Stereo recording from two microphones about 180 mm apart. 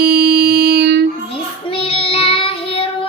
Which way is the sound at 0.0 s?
65° right (ahead or behind).